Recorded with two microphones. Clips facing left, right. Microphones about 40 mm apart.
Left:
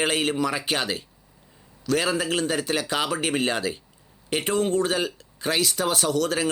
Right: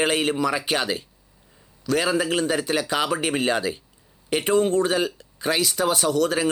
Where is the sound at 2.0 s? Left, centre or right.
Right.